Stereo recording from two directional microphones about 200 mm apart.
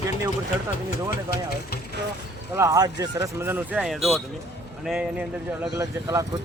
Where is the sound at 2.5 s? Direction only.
15° right (ahead or behind).